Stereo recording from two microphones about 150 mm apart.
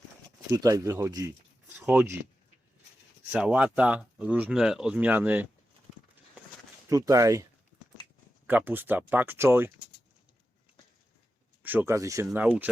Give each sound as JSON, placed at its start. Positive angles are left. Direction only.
{"t": 0.5, "sound": "speech", "side_deg": -25}
{"t": 3.3, "sound": "speech", "side_deg": -5}
{"t": 6.9, "sound": "speech", "side_deg": -20}
{"t": 8.4, "sound": "speech", "side_deg": -10}
{"t": 11.6, "sound": "speech", "side_deg": -10}